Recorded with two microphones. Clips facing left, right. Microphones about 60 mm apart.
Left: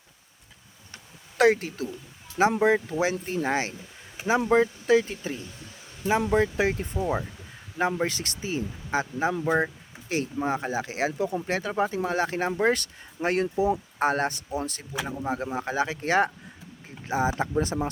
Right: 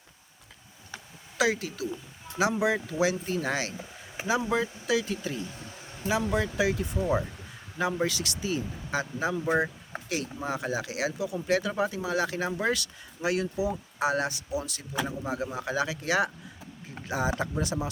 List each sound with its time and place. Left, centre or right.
1.4 s speech: left
6.9 s speech: left
7.8 s speech: left
17.1 s speech: left